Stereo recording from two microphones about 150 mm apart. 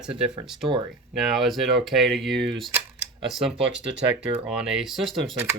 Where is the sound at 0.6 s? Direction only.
30° right (ahead or behind).